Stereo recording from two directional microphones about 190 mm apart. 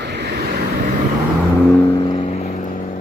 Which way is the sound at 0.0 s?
60° right (ahead or behind).